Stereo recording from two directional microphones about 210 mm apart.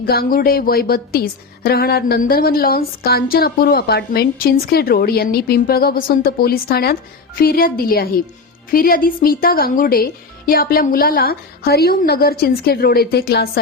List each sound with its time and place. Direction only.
0.1 s a woman's voice: 45° left (ahead or behind)